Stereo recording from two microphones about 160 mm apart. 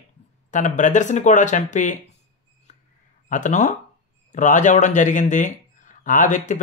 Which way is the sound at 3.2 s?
50° left (ahead or behind).